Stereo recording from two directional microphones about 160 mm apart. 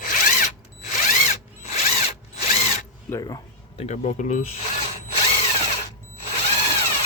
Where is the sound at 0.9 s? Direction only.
50° left (ahead or behind).